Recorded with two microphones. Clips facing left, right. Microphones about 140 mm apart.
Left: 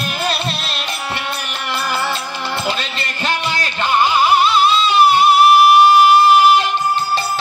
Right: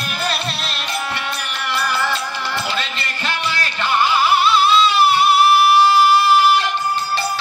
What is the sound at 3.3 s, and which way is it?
Music, 20° left (ahead or behind).